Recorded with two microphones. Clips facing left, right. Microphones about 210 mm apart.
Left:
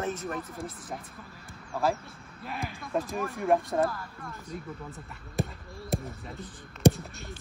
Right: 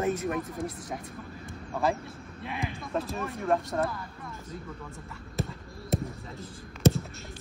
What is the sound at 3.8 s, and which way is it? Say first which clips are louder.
Speech: left 2 dB; centre (ahead or behind).